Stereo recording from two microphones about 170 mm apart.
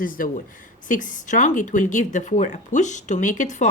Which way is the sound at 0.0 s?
55° left (ahead or behind).